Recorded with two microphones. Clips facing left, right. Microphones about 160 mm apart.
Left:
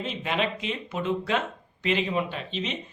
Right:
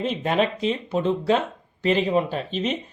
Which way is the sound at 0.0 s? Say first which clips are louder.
Right 6 dB; 40° right (ahead or behind).